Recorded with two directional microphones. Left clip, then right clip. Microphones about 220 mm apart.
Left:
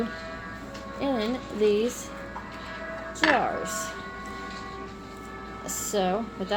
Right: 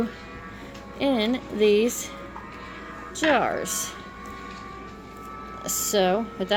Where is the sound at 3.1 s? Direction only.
45° right (ahead or behind).